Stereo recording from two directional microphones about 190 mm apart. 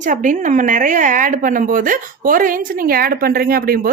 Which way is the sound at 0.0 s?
45° right (ahead or behind).